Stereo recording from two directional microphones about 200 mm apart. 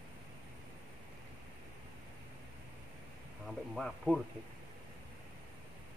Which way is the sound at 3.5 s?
Centre (ahead or behind).